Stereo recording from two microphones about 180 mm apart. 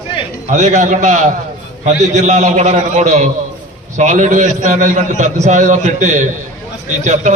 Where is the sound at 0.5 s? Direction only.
45° right (ahead or behind).